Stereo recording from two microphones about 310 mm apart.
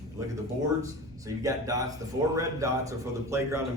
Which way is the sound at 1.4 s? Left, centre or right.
Centre.